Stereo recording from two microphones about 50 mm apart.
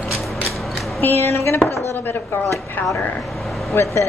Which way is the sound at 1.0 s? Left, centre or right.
Left.